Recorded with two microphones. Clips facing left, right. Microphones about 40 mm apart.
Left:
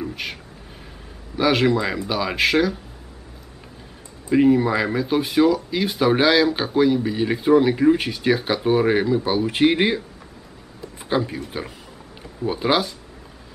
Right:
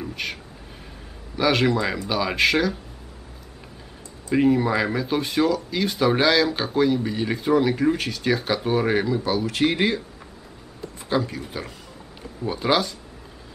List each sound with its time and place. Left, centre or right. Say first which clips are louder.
0.0 s a sound: left 1 dB; centre
1.3 s speech: left 2 dB; centre
4.3 s speech: left 3 dB; centre
9.5 s speech: left 4 dB; left